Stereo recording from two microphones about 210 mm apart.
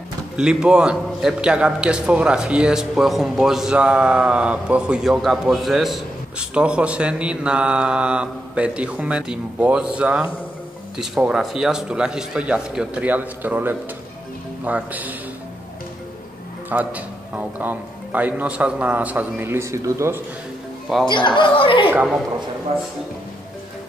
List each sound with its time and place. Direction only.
0.4 s a man's voice: 5° right (ahead or behind)
16.6 s a man's voice: 5° right (ahead or behind)
21.1 s speech: 20° left (ahead or behind)
21.9 s a man's voice: 5° right (ahead or behind)